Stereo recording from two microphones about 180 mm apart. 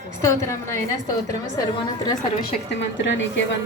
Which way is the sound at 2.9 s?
90° left.